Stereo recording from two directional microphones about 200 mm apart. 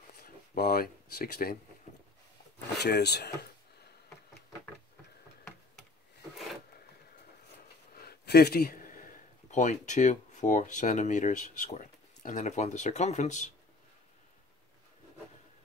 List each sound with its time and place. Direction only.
0.2 s a sound: 50° left (ahead or behind)
2.8 s speech: 55° left (ahead or behind)
7.9 s a man's voice: 50° left (ahead or behind)